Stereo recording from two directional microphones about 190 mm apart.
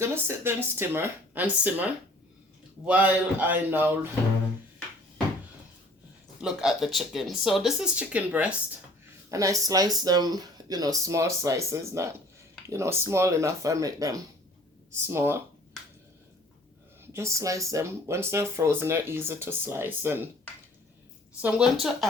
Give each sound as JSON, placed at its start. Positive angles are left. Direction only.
{"t": 0.0, "sound": "speech", "side_deg": -15}
{"t": 6.4, "sound": "speech", "side_deg": -5}
{"t": 9.3, "sound": "speech", "side_deg": -15}
{"t": 17.1, "sound": "speech", "side_deg": -15}
{"t": 21.4, "sound": "speech", "side_deg": 0}